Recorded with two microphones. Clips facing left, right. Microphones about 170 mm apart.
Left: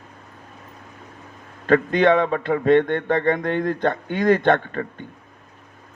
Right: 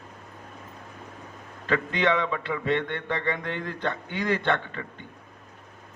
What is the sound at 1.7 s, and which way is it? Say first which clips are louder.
A man's voice: left 8 dB; 50° left (ahead or behind).